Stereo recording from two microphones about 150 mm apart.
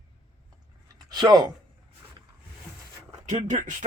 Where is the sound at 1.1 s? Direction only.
25° right (ahead or behind).